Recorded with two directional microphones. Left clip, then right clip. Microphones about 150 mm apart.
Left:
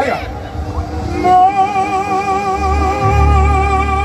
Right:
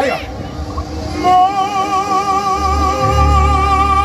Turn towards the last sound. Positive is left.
turn(degrees=-20)  # may be behind; listen again after turning